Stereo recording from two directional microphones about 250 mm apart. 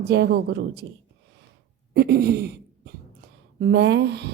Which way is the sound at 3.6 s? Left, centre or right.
Right.